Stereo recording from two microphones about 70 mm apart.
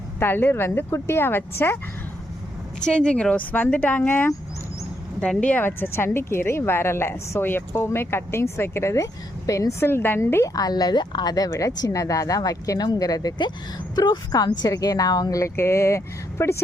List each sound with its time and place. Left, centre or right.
0.2 s a woman's voice: left
2.8 s speech: centre
5.4 s a woman's voice: left
9.8 s a woman's voice: left
10.4 s speech: left
11.9 s speech: left
13.9 s speech: left
15.4 s speech: left